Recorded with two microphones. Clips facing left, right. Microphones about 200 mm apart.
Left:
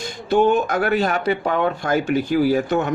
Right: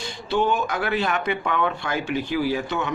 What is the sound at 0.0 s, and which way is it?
Speech, 45° left (ahead or behind).